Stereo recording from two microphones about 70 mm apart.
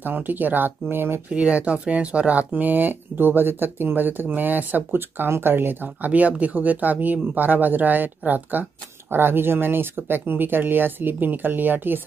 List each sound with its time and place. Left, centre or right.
0.0 s speech: right
1.3 s speech: centre